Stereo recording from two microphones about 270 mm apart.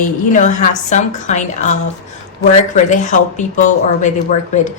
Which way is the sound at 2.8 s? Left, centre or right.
Left.